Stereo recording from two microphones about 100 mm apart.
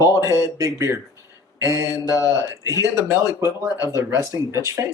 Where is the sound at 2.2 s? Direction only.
35° left (ahead or behind).